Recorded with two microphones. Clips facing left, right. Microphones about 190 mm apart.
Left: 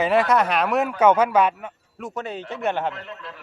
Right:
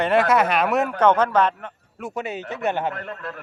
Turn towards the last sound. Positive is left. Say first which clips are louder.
# right 4 dB
turn(degrees=-50)  # may be behind; listen again after turning